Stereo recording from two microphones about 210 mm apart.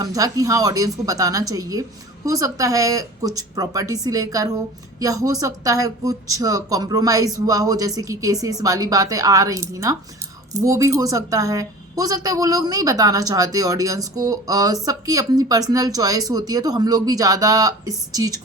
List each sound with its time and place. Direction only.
0.0 s a woman's voice: 15° right (ahead or behind)